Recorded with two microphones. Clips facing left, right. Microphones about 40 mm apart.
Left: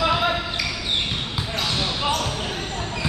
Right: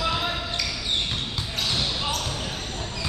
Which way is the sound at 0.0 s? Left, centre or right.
Left.